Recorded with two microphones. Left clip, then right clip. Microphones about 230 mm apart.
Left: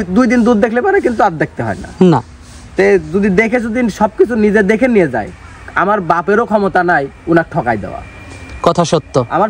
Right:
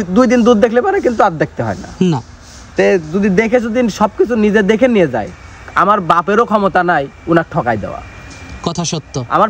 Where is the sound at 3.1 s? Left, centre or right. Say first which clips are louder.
Even; centre.